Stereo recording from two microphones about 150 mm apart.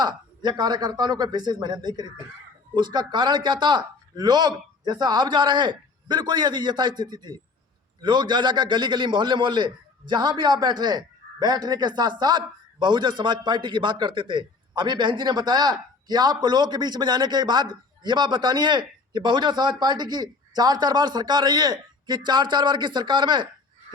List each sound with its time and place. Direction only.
0.0 s a man's voice: 30° right (ahead or behind)